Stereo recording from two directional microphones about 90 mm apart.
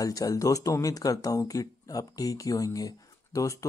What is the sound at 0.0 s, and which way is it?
Speech, 40° left (ahead or behind).